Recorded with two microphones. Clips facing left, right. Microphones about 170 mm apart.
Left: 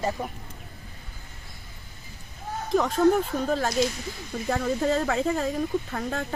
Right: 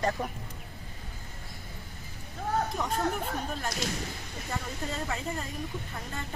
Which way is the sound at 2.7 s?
90° left.